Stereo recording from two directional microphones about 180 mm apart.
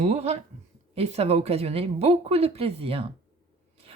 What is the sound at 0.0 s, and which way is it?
A woman's voice, 35° right (ahead or behind).